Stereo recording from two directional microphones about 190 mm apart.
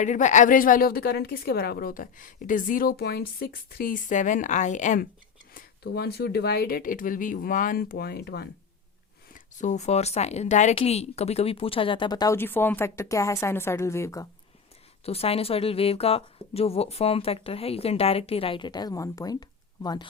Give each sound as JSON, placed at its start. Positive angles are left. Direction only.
{"t": 0.0, "sound": "a woman's voice", "side_deg": 40}
{"t": 5.5, "sound": "a woman's voice", "side_deg": 55}
{"t": 9.3, "sound": "speech", "side_deg": 40}
{"t": 15.0, "sound": "speech", "side_deg": 30}